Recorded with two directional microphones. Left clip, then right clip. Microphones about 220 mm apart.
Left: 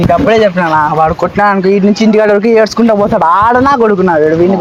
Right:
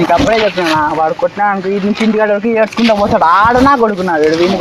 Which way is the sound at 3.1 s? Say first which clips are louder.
Even; 35° left (ahead or behind).